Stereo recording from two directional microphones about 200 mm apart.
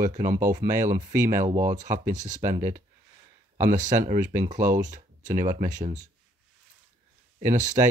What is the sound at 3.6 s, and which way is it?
Speech, 40° right (ahead or behind).